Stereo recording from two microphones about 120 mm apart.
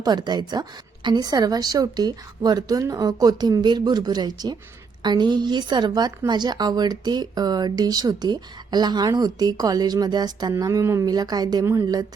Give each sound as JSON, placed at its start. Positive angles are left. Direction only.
{"t": 0.0, "sound": "a woman's voice", "side_deg": -35}
{"t": 10.5, "sound": "a woman's voice", "side_deg": -25}